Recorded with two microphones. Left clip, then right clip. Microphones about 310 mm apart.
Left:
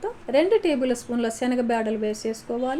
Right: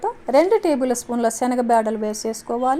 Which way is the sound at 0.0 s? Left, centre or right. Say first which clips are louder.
Right 5 dB; right.